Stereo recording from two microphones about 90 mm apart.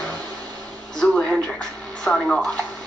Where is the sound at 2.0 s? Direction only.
5° left (ahead or behind).